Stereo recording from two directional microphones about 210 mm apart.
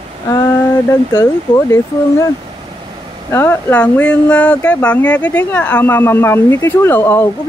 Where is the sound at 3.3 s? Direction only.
10° left (ahead or behind).